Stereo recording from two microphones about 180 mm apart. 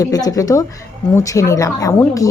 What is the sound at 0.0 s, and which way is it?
Speech, 20° left (ahead or behind).